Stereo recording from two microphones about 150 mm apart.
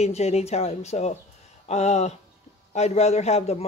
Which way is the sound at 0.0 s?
45° left (ahead or behind).